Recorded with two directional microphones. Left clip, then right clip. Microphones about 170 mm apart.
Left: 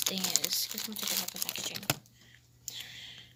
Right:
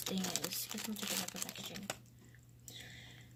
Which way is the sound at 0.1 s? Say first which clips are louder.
Left 5 dB; 20° right (ahead or behind).